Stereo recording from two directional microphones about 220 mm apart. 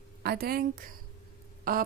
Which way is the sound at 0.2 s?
45° right (ahead or behind).